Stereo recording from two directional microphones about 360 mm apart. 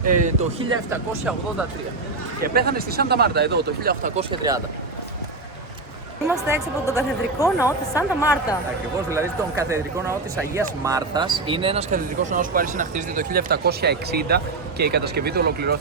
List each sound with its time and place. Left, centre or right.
0.0 s speech: right
0.7 s speech: centre
2.4 s speech: right
6.2 s a woman's voice: centre
6.8 s speech: centre
9.0 s speech: centre; by 15.8 s right